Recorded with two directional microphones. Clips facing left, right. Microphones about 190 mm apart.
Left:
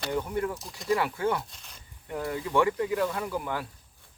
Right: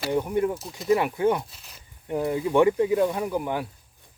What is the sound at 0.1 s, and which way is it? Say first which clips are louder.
Speech: right 6 dB; 15° right (ahead or behind).